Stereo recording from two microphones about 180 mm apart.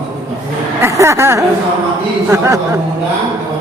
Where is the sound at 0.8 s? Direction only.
15° right (ahead or behind).